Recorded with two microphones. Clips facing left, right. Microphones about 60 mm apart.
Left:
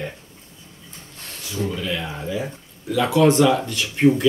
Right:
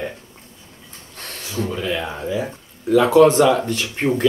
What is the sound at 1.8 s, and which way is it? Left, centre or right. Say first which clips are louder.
Speech: right 3 dB; right.